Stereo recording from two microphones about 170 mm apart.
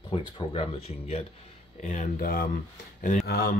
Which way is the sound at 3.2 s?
65° left (ahead or behind).